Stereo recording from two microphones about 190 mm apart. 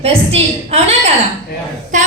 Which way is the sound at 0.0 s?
30° right (ahead or behind).